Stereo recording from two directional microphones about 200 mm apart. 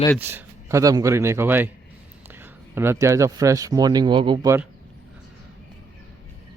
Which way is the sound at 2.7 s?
15° right (ahead or behind).